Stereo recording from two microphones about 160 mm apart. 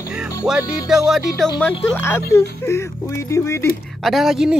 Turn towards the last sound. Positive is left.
turn(degrees=0)  # may be behind; listen again after turning